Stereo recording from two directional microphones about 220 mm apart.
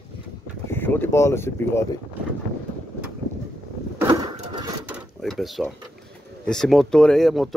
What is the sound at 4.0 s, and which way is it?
Vehicle, 10° right (ahead or behind).